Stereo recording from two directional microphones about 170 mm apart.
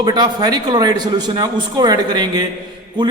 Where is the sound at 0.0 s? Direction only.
25° right (ahead or behind).